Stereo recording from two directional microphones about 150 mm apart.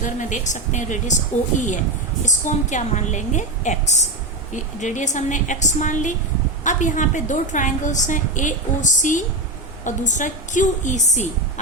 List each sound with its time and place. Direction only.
0.0 s speech: 55° left (ahead or behind)
2.2 s a woman's voice: 55° left (ahead or behind)